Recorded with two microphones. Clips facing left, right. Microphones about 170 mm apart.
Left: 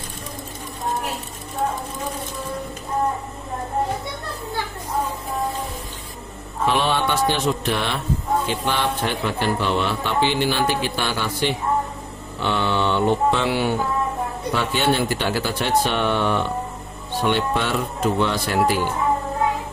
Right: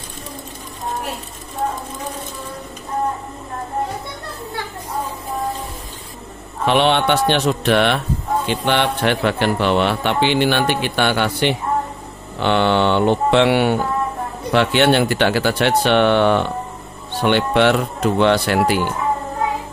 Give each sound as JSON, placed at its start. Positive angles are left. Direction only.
{"t": 6.6, "sound": "speech", "side_deg": -70}